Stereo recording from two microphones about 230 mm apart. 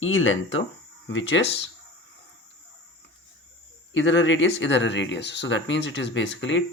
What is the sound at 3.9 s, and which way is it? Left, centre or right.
Speech, left.